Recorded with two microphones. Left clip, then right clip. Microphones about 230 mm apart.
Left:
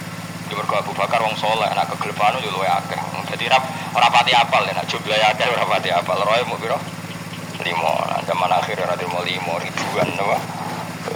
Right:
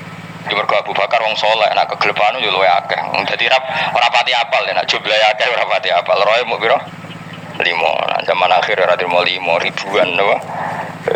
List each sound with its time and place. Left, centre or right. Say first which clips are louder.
0.4 s speech: right 7 dB; right